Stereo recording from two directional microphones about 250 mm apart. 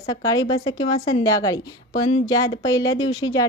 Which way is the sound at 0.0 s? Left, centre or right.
Centre.